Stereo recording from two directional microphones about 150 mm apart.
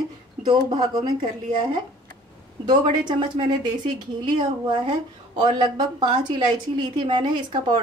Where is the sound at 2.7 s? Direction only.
30° right (ahead or behind).